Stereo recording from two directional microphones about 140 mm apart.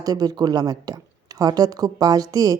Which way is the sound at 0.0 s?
30° right (ahead or behind).